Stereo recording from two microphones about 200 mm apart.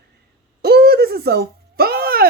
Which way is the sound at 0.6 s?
50° right (ahead or behind).